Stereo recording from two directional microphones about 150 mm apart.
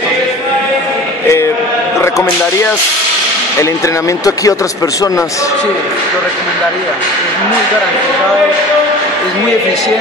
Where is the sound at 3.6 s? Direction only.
20° left (ahead or behind).